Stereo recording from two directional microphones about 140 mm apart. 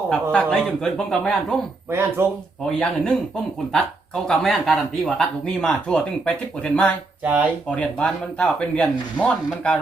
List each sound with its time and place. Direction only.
0.1 s speech: 5° left (ahead or behind)
1.9 s speech: 15° right (ahead or behind)
2.6 s speech: 5° left (ahead or behind)